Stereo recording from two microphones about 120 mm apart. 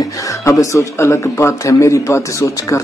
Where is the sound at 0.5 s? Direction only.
25° left (ahead or behind).